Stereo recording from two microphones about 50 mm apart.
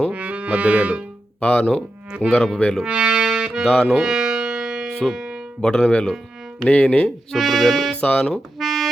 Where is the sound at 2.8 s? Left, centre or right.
Centre.